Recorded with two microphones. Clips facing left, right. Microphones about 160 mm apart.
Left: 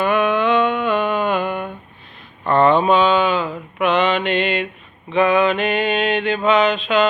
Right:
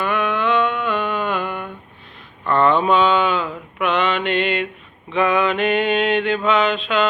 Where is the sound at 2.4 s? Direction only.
30° left (ahead or behind).